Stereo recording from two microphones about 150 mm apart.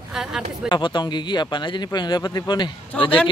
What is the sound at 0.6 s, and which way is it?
Speech, 30° left (ahead or behind).